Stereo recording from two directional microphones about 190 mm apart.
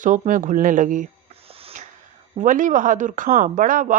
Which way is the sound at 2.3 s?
45° right (ahead or behind).